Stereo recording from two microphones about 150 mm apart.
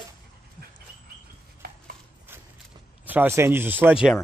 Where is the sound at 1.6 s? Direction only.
90° right.